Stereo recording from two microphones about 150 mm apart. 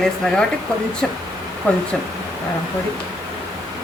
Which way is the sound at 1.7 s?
10° left (ahead or behind).